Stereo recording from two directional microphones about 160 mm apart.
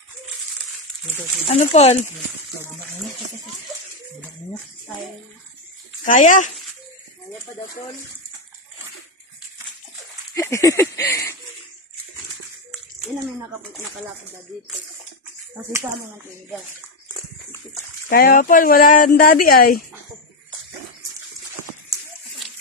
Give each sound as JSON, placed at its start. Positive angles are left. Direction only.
{"t": 1.5, "sound": "speech", "side_deg": 45}
{"t": 6.0, "sound": "speech", "side_deg": 55}
{"t": 10.3, "sound": "a sound", "side_deg": 20}
{"t": 18.1, "sound": "speech", "side_deg": 65}